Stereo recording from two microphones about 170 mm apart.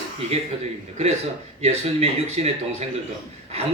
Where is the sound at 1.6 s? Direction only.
40° right (ahead or behind).